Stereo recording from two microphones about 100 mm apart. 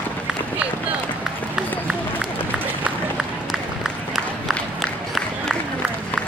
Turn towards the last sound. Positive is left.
turn(degrees=0)  # may be behind; listen again after turning